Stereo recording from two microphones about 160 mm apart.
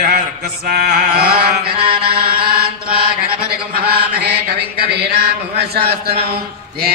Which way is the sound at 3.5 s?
75° right (ahead or behind).